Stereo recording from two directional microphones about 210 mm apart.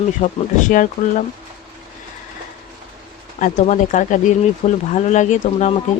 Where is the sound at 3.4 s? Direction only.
35° left (ahead or behind).